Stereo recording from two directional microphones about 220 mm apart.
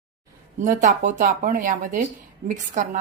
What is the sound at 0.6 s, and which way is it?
Speech, 35° right (ahead or behind).